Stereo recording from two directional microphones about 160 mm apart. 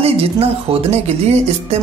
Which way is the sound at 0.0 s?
40° right (ahead or behind).